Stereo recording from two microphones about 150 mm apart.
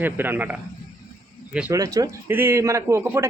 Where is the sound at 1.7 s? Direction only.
20° right (ahead or behind).